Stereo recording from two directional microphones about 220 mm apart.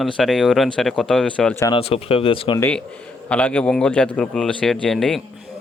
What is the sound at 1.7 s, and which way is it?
Speech, 25° left (ahead or behind).